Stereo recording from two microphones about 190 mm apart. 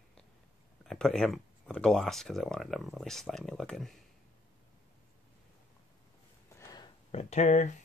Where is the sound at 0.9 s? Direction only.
5° left (ahead or behind).